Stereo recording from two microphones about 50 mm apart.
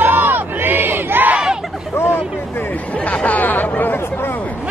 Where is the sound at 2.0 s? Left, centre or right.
Left.